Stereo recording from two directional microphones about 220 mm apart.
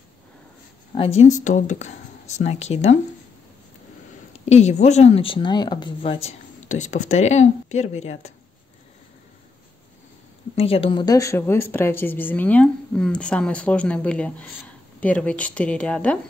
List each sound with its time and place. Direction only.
0.9 s speech: 25° left (ahead or behind)
4.5 s speech: 30° left (ahead or behind)
10.5 s a woman's voice: 25° left (ahead or behind); by 16.2 s 5° left (ahead or behind)